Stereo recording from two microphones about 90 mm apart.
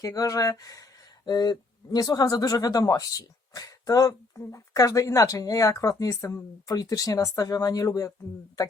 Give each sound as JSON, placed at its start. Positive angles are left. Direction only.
{"t": 0.0, "sound": "speech", "side_deg": 40}
{"t": 1.2, "sound": "speech", "side_deg": 50}